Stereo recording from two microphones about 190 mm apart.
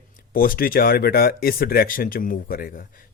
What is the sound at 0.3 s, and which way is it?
Speech, 50° left (ahead or behind).